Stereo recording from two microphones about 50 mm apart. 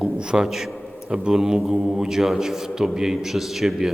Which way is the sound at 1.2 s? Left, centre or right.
Centre.